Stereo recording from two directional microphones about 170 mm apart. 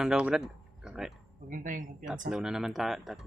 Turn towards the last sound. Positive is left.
turn(degrees=0)  # may be behind; listen again after turning